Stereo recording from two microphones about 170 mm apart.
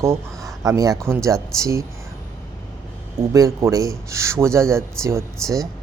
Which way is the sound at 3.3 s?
20° right (ahead or behind).